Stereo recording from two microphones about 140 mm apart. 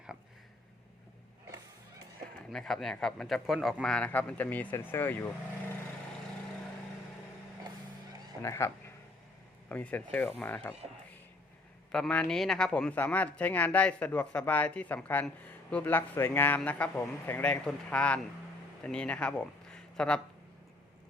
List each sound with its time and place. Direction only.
2.5 s speech: centre (ahead or behind)
8.4 s speech: 20° left (ahead or behind)
11.9 s speech: 5° left (ahead or behind)